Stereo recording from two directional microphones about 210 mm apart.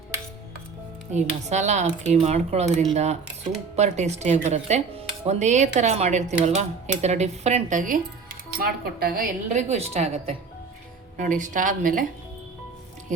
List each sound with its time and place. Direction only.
1.1 s speech: 35° right (ahead or behind)